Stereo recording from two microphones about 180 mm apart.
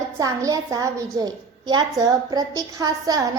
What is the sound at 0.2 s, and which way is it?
A child's voice, 20° right (ahead or behind).